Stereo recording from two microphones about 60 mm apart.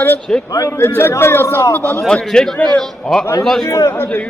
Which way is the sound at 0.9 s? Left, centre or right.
Left.